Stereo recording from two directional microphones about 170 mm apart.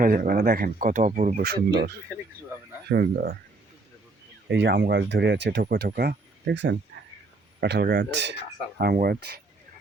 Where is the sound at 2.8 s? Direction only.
70° right (ahead or behind).